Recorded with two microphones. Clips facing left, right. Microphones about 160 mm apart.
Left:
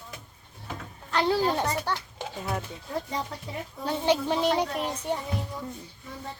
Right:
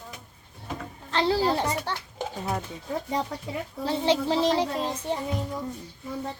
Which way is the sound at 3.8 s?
30° right (ahead or behind).